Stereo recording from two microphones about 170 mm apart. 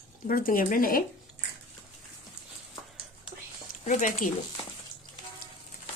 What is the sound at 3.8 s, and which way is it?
Speech, 45° left (ahead or behind).